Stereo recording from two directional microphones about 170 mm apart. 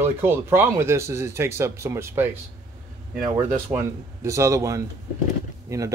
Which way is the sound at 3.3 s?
15° right (ahead or behind).